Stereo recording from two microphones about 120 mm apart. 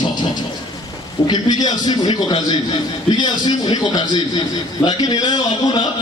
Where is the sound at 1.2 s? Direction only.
35° left (ahead or behind).